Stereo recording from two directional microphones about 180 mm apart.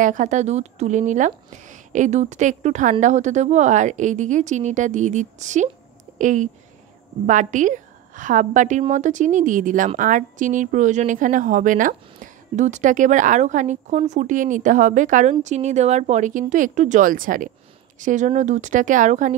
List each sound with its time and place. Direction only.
0.0 s a woman's voice: 45° right (ahead or behind)